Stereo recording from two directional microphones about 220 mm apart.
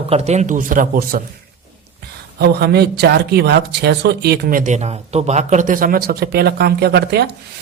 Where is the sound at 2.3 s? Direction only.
45° right (ahead or behind).